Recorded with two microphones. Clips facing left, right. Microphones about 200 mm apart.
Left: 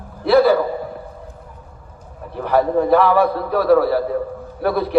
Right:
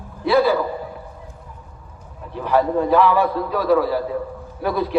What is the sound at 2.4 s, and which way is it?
A man's voice, 45° left (ahead or behind).